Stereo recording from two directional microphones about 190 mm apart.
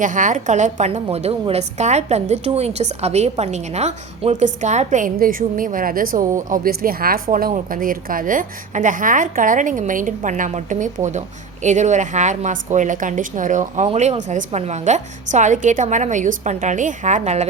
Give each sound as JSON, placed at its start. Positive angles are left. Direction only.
{"t": 0.0, "sound": "a woman's voice", "side_deg": -40}